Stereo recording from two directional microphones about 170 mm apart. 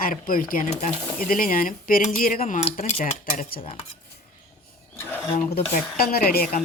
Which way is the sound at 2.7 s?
50° left (ahead or behind).